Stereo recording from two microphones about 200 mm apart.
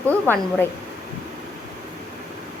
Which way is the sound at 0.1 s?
5° left (ahead or behind).